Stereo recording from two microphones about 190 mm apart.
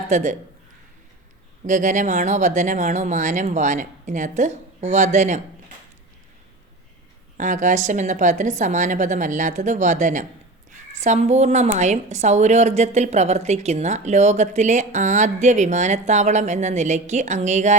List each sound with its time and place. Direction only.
0.1 s a woman's voice: 40° right (ahead or behind)
1.6 s a woman's voice: 40° right (ahead or behind)
7.3 s a woman's voice: 40° right (ahead or behind)